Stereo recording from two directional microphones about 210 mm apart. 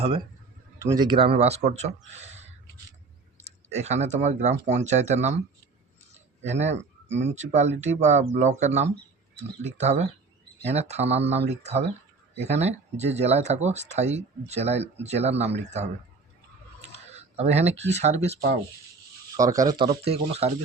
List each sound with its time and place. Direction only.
0.8 s speech: 15° right (ahead or behind)
17.1 s speech: 30° right (ahead or behind)
19.4 s speech: 15° right (ahead or behind)